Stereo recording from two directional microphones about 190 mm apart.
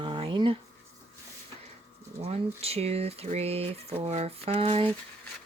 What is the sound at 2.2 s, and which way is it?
Speech, 30° right (ahead or behind).